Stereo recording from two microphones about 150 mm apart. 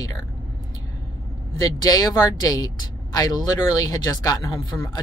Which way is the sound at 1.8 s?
25° left (ahead or behind).